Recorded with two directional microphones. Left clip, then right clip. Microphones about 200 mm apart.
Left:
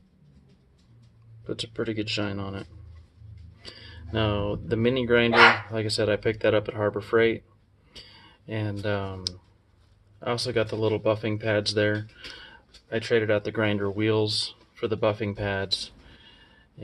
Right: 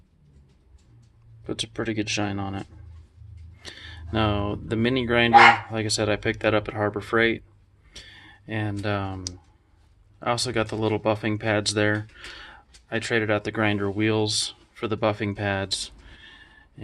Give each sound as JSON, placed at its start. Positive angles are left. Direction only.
{"t": 1.5, "sound": "speech", "side_deg": -35}
{"t": 3.8, "sound": "speech", "side_deg": -40}
{"t": 10.2, "sound": "speech", "side_deg": -40}